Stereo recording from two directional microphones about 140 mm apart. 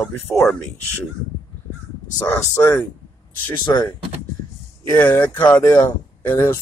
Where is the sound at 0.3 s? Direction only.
5° left (ahead or behind).